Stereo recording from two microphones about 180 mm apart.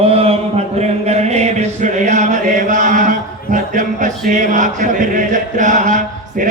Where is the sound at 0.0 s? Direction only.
35° right (ahead or behind).